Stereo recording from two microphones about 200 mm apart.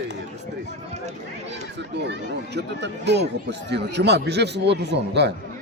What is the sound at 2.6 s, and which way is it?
Speech, 60° right (ahead or behind).